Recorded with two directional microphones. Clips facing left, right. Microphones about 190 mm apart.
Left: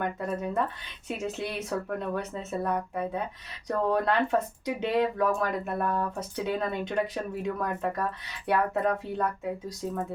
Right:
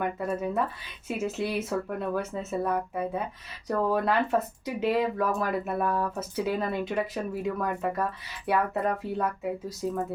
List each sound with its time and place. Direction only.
0.0 s speech: 5° right (ahead or behind)